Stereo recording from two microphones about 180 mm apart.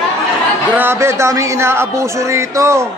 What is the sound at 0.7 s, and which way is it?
A man's voice, 15° right (ahead or behind).